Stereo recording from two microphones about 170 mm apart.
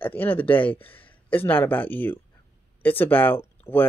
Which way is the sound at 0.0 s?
10° left (ahead or behind).